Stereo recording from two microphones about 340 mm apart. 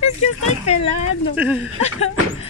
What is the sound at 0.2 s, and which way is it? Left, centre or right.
Speech, centre.